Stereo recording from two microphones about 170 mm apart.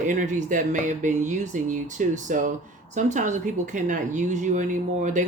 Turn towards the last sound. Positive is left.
turn(degrees=-45)  # may be behind; listen again after turning